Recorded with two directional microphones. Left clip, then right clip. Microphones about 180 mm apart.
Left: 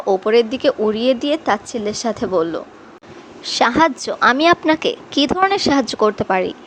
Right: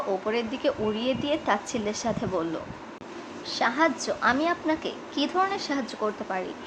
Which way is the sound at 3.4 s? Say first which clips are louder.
Left 10 dB; 45° left (ahead or behind).